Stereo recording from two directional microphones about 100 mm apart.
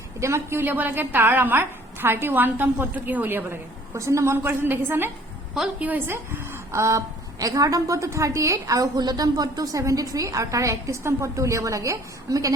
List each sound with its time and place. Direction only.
0.2 s a woman's voice: 25° right (ahead or behind)